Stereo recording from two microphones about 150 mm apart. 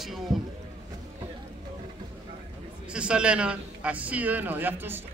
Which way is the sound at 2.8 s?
5° right (ahead or behind).